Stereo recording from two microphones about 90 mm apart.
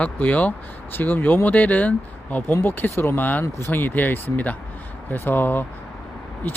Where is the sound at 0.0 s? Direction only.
15° left (ahead or behind).